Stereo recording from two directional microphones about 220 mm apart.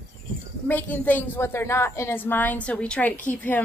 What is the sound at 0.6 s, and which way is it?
A woman's voice, 10° left (ahead or behind).